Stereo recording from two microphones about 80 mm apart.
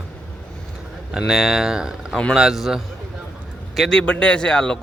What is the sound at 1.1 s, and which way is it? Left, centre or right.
A man's voice, centre.